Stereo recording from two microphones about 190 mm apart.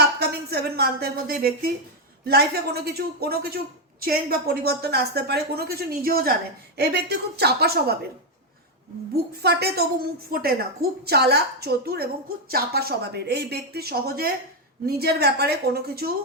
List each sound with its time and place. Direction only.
0.2 s a woman's voice: 60° right (ahead or behind)
9.4 s a woman's voice: 60° right (ahead or behind)